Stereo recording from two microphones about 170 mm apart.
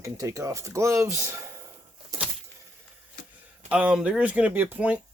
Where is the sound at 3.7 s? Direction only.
5° right (ahead or behind).